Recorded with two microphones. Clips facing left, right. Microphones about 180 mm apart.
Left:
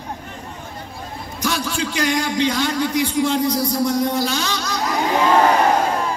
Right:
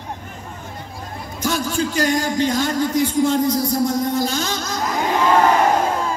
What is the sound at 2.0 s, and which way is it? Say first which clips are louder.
A man's voice: even; 45° right (ahead or behind).